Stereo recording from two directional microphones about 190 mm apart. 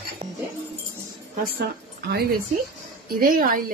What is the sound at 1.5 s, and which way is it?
A woman's voice, 55° right (ahead or behind).